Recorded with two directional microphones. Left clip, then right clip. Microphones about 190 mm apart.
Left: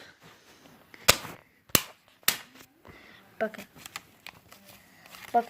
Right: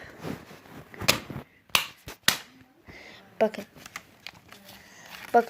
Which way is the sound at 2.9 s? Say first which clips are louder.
Right 6 dB; 20° right (ahead or behind).